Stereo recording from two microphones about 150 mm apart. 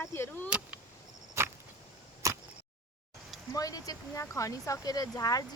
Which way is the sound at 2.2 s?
20° right (ahead or behind).